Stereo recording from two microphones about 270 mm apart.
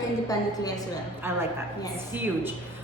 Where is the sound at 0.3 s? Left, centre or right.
Centre.